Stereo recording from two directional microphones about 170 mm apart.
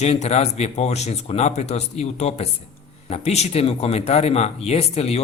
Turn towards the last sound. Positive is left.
turn(degrees=40)  # may be behind; listen again after turning